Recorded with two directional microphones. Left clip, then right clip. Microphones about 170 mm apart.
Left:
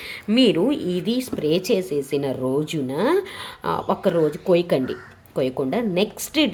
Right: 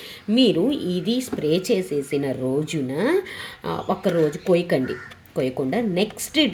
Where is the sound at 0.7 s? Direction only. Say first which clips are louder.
Left 1 dB; 25° left (ahead or behind).